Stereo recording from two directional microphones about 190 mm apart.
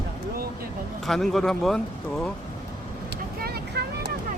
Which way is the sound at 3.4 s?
60° right (ahead or behind).